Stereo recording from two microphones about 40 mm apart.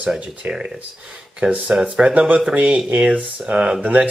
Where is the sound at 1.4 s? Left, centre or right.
Right.